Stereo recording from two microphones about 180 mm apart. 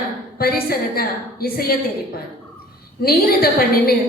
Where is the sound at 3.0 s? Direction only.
55° left (ahead or behind).